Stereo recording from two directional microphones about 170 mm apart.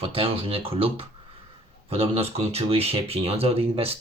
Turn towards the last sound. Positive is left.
turn(degrees=-35)  # may be behind; listen again after turning